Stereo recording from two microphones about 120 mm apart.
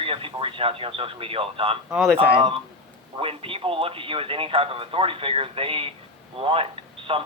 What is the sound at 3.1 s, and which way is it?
Speech, 50° right (ahead or behind).